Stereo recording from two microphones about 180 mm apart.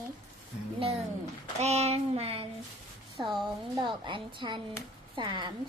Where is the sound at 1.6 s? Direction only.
35° right (ahead or behind).